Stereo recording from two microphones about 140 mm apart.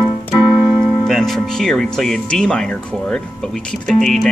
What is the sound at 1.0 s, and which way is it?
Speech, centre (ahead or behind).